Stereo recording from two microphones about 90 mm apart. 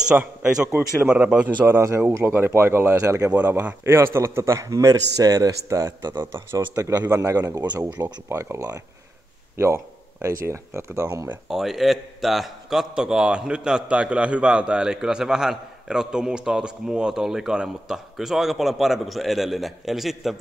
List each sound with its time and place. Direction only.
0.1 s a man's voice: 15° right (ahead or behind)
0.7 s speech: 25° right (ahead or behind)
1.0 s speech: 10° right (ahead or behind)
1.7 s speech: 30° right (ahead or behind)
3.3 s a man's voice: 20° right (ahead or behind); by 6.2 s 45° right (ahead or behind)
6.3 s a man's voice: 30° right (ahead or behind)
10.2 s speech: 30° right (ahead or behind)
11.4 s a man's voice: 5° right (ahead or behind)